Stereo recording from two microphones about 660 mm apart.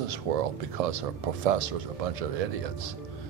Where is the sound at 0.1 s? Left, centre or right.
Right.